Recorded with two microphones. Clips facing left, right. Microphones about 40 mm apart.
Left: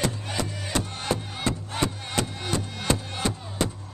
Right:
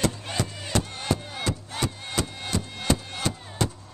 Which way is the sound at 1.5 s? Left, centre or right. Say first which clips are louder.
Left 3 dB; left.